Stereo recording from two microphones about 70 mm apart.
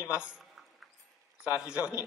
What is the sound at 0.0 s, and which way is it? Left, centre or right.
Speech, centre.